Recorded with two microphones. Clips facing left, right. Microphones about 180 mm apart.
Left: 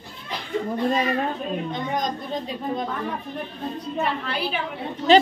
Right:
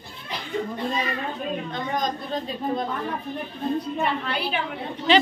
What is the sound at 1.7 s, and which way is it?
Speech, 20° left (ahead or behind).